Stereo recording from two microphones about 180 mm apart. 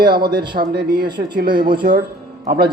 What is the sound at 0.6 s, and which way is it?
Speech, 55° right (ahead or behind).